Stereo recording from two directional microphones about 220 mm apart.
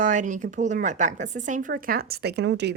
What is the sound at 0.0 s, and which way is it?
Speech, 35° right (ahead or behind).